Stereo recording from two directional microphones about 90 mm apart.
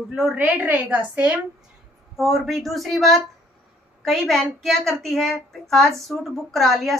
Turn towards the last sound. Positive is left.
turn(degrees=0)  # may be behind; listen again after turning